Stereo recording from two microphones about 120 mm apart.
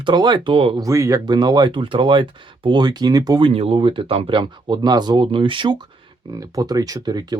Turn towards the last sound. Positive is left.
turn(degrees=-35)  # may be behind; listen again after turning